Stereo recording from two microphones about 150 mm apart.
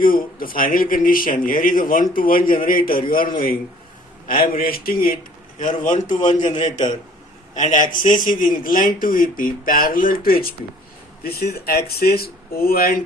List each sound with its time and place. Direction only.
0.0 s speech: 70° left (ahead or behind)
5.5 s a man's voice: 60° left (ahead or behind)
7.5 s speech: 55° left (ahead or behind); by 10.5 s 75° left (ahead or behind)
11.2 s speech: 90° left